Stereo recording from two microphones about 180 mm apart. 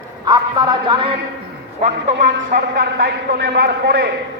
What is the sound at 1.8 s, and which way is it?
Speech, 40° right (ahead or behind).